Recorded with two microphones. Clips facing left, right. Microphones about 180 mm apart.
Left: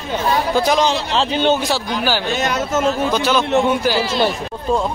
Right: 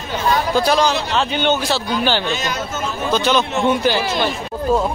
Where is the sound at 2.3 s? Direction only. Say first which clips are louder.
Left 5 dB; 65° left (ahead or behind).